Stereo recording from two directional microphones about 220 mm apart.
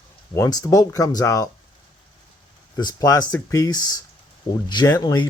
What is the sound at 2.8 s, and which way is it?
Speech, 15° left (ahead or behind).